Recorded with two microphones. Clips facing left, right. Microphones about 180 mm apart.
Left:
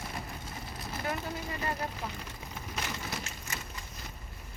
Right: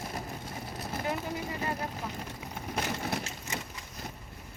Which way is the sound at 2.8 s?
55° right (ahead or behind).